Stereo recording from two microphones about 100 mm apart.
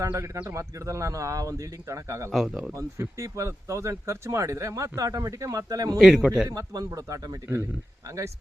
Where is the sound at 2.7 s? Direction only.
30° right (ahead or behind).